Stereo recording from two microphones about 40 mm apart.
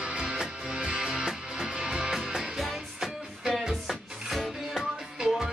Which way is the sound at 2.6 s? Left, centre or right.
Centre.